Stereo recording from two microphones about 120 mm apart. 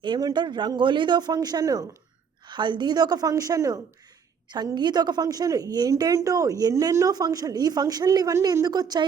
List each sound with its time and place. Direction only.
0.0 s a woman's voice: 35° right (ahead or behind)